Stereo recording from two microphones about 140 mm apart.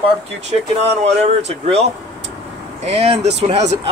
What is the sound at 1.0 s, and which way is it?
Speech, 50° right (ahead or behind).